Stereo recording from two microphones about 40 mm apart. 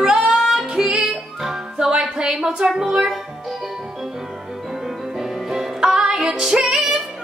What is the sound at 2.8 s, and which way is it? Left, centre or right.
Speech, centre.